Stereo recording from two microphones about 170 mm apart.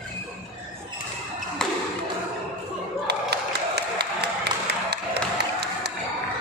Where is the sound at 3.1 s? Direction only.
75° right (ahead or behind).